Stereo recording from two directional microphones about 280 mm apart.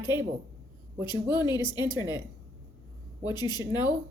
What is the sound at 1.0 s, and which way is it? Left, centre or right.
Speech, centre.